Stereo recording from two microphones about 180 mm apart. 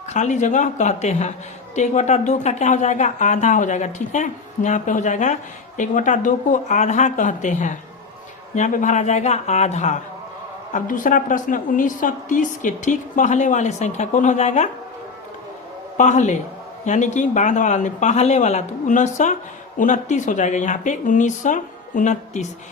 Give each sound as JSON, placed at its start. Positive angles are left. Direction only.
{"t": 0.1, "sound": "speech", "side_deg": 40}
{"t": 16.0, "sound": "speech", "side_deg": 40}